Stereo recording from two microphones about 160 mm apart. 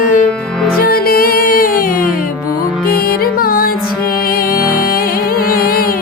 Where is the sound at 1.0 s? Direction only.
65° left (ahead or behind).